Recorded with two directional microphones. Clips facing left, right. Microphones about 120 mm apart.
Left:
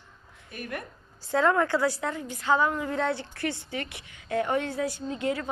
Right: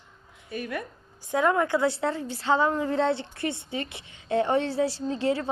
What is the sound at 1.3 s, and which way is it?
A woman's voice, 20° right (ahead or behind).